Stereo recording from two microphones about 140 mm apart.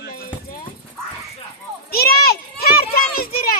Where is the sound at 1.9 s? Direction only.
90° left.